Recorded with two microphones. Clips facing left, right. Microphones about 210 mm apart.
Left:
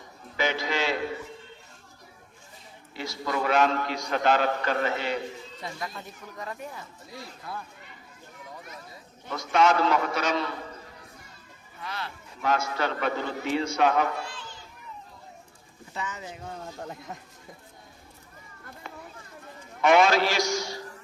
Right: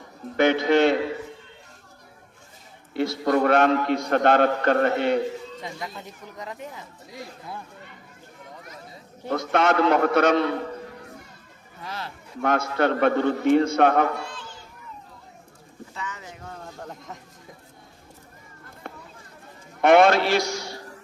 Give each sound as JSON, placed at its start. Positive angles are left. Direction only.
{"t": 0.3, "sound": "a man's voice", "side_deg": -60}
{"t": 2.9, "sound": "a man's voice", "side_deg": -55}
{"t": 5.6, "sound": "speech", "side_deg": -20}
{"t": 9.3, "sound": "a man's voice", "side_deg": -55}
{"t": 11.9, "sound": "speech", "side_deg": -35}
{"t": 12.4, "sound": "a man's voice", "side_deg": -55}
{"t": 16.0, "sound": "speech", "side_deg": 20}
{"t": 16.8, "sound": "speech", "side_deg": 5}
{"t": 18.8, "sound": "a sound", "side_deg": -55}
{"t": 19.8, "sound": "a man's voice", "side_deg": -55}